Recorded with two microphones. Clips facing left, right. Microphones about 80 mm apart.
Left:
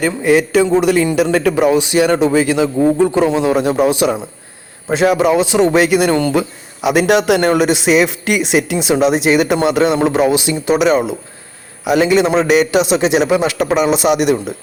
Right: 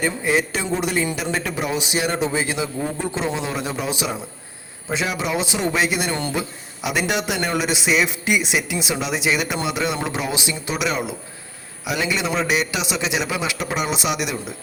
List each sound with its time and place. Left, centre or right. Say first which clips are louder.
0.0 s a man's voice: left 8 dB; left
1.1 s a man's voice: left 12 dB; left